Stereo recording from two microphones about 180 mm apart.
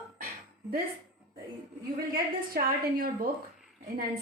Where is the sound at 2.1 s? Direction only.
55° right (ahead or behind).